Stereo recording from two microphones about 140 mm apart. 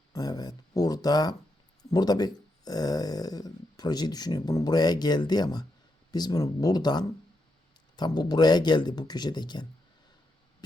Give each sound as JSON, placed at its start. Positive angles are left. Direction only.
{"t": 0.1, "sound": "speech", "side_deg": 30}